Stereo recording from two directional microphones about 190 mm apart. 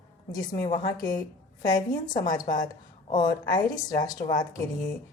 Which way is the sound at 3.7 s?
20° left (ahead or behind).